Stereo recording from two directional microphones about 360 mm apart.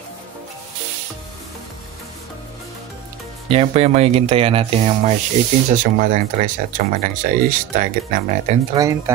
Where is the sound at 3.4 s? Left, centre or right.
Centre.